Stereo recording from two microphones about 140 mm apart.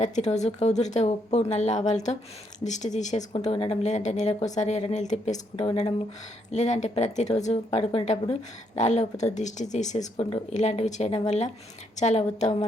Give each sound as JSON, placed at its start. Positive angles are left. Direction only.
{"t": 0.0, "sound": "a woman's voice", "side_deg": 55}